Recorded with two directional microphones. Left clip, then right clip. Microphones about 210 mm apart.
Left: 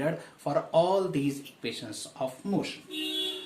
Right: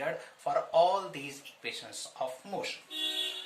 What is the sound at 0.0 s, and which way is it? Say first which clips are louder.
Speech: left 3 dB; 20° left (ahead or behind).